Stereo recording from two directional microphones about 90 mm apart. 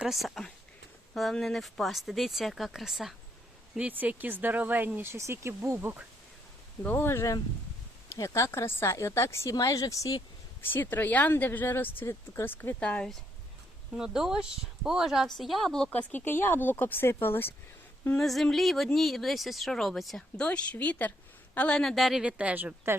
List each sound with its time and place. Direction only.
0.0 s speech: centre (ahead or behind)
3.8 s speech: 20° right (ahead or behind)
5.1 s speech: 30° right (ahead or behind)
6.8 s speech: 25° left (ahead or behind)
9.6 s speech: 45° left (ahead or behind)
10.7 s speech: 20° left (ahead or behind)
12.8 s speech: 10° left (ahead or behind)
13.9 s a woman's voice: 5° right (ahead or behind)
15.9 s speech: 20° left (ahead or behind)
18.2 s speech: centre (ahead or behind)
21.8 s speech: centre (ahead or behind)
22.2 s a woman's voice: 15° right (ahead or behind)